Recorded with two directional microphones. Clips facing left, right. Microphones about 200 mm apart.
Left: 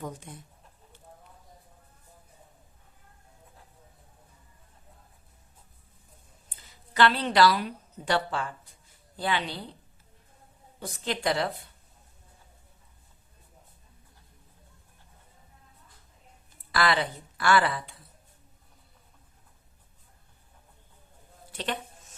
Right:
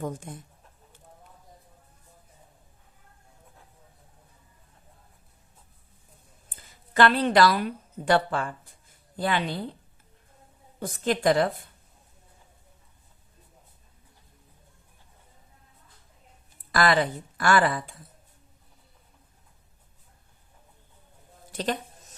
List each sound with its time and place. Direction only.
0.0 s speech: 50° right (ahead or behind)
6.5 s speech: 50° right (ahead or behind)
10.8 s speech: 50° right (ahead or behind)
16.7 s speech: 45° right (ahead or behind)
21.5 s a sound: 40° right (ahead or behind)